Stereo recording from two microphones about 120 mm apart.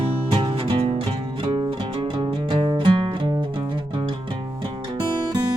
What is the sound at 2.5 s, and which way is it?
Music, 45° right (ahead or behind).